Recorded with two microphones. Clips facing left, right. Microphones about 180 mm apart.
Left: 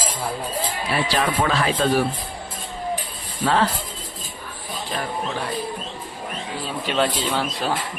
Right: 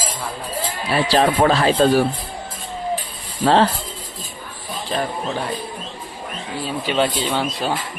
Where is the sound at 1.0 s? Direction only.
35° right (ahead or behind).